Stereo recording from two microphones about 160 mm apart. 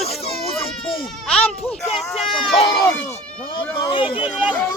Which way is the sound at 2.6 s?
25° left (ahead or behind).